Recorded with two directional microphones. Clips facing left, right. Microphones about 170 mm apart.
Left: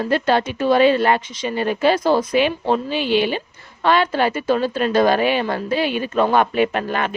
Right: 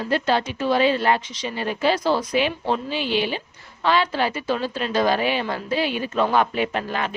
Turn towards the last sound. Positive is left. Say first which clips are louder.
# left 4 dB
turn(degrees=60)  # may be behind; listen again after turning